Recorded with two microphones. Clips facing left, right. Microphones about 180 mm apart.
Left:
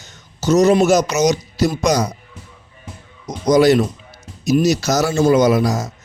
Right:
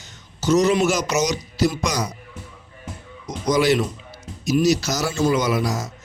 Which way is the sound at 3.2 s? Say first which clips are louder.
Left 6 dB; 40° left (ahead or behind).